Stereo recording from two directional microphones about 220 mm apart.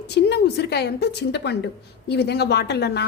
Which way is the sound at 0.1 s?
50° left (ahead or behind).